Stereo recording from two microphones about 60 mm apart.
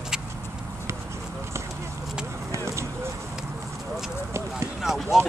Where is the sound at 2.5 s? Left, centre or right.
Right.